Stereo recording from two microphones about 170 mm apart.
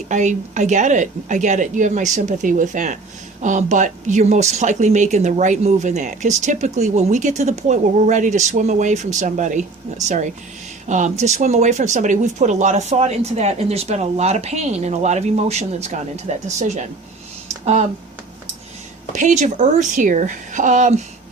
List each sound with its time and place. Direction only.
0.1 s speech: 45° right (ahead or behind)
19.1 s speech: 45° right (ahead or behind)